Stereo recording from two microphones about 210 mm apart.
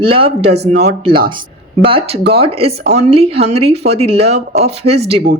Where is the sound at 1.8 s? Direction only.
25° right (ahead or behind).